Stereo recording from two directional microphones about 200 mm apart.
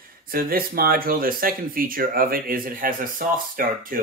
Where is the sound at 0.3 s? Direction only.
45° right (ahead or behind).